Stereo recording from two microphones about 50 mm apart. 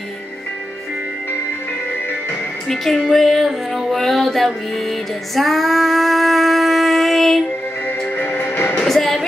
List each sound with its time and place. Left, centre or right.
2.7 s music: centre
5.3 s female singing: centre
8.2 s music: left
8.8 s a sound: centre